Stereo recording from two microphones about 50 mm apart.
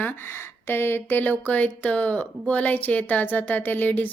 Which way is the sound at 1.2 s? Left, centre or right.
Left.